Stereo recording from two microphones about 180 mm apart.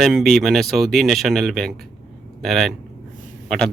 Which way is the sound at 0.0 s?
Centre (ahead or behind).